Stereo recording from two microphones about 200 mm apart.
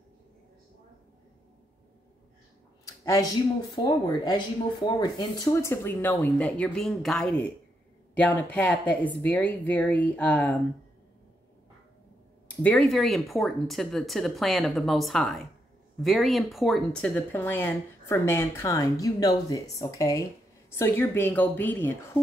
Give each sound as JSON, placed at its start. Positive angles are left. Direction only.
{"t": 2.8, "sound": "a sound", "side_deg": 15}
{"t": 3.7, "sound": "speech", "side_deg": 20}
{"t": 12.4, "sound": "speech", "side_deg": 5}